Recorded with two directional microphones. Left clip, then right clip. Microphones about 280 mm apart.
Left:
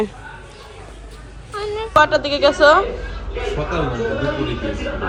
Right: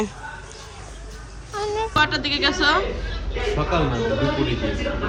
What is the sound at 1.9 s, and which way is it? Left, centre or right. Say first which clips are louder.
Speech: left 8 dB; centre.